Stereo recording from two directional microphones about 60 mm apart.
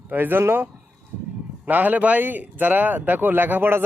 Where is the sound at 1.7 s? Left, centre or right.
Right.